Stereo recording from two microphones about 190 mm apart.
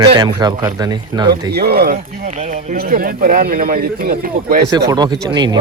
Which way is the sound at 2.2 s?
40° right (ahead or behind).